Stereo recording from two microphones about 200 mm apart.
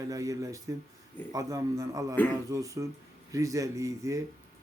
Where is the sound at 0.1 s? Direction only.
15° right (ahead or behind).